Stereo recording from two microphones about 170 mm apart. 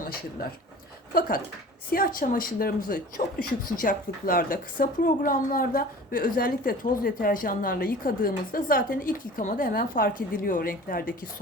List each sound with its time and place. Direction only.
1.9 s a woman's voice: 60° left (ahead or behind)